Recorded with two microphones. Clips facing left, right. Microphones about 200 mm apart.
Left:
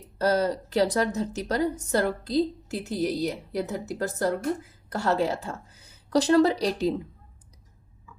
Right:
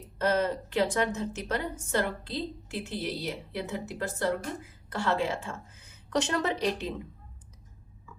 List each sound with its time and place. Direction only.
0.2 s a woman's voice: 35° left (ahead or behind)